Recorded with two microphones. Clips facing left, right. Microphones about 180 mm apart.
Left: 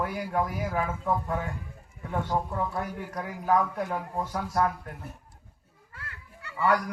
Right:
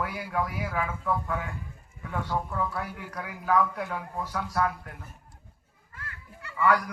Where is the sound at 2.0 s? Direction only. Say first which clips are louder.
Left 2 dB; 25° left (ahead or behind).